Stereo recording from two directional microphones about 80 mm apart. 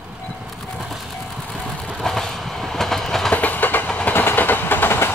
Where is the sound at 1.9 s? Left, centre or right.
Centre.